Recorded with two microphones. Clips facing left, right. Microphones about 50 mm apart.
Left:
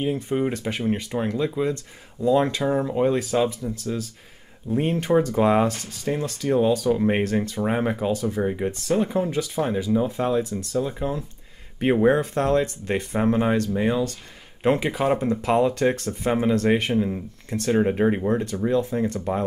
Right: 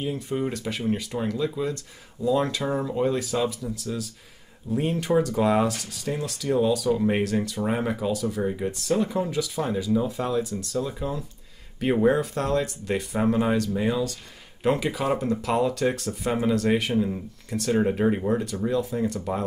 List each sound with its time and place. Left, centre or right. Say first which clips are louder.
0.0 s speech: left 4 dB; left
2.6 s speech: left 3 dB; centre; by 16.1 s left
16.1 s speech: left 3 dB; centre
17.7 s speech: left 2 dB; centre